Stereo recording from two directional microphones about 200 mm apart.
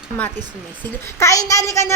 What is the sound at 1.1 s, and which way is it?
Speech, 15° left (ahead or behind).